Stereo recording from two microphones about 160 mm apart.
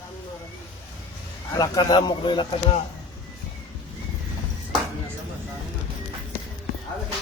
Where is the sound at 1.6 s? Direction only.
25° left (ahead or behind).